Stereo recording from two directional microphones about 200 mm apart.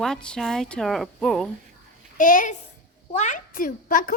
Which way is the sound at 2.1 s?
40° left (ahead or behind).